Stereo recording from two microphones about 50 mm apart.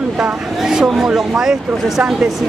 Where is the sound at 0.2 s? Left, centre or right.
Centre.